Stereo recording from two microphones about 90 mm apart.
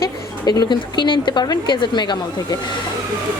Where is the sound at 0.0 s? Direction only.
45° left (ahead or behind).